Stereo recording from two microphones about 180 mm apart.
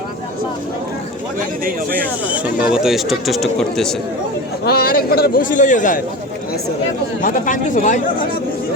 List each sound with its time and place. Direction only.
2.2 s speech: 10° right (ahead or behind)
4.6 s a man's voice: 60° left (ahead or behind)
7.2 s a man's voice: 45° left (ahead or behind)